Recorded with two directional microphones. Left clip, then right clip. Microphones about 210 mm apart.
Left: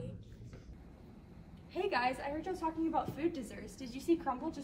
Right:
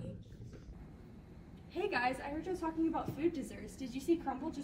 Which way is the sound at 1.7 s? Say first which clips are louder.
Left 1 dB; 30° left (ahead or behind).